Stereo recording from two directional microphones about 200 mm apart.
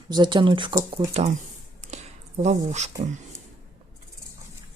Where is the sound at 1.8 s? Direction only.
35° right (ahead or behind).